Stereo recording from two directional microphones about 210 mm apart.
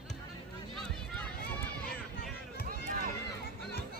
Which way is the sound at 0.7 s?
5° left (ahead or behind).